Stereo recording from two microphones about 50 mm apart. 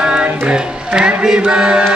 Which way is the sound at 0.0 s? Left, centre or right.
Centre.